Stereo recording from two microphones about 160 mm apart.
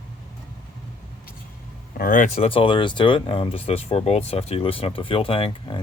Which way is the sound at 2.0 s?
55° left (ahead or behind).